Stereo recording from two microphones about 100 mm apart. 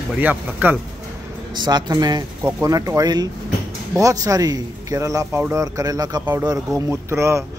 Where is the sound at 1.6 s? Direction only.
45° right (ahead or behind).